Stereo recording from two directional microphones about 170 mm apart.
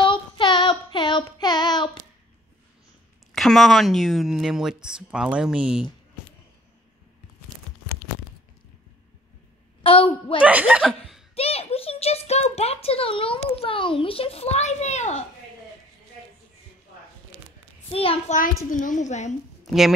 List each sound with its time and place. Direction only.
0.0 s child singing: 30° left (ahead or behind)
3.3 s speech: centre (ahead or behind)
9.8 s a child's voice: 30° left (ahead or behind)
10.4 s speech: 10° right (ahead or behind)
10.8 s chuckle: centre (ahead or behind)
11.3 s a child's voice: 35° left (ahead or behind)
17.8 s a child's voice: 35° left (ahead or behind)
18.7 s a woman's voice: 50° left (ahead or behind)
19.6 s a sound: centre (ahead or behind)